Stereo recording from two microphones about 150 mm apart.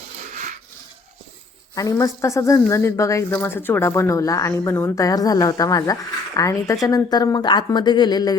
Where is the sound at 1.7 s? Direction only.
20° left (ahead or behind).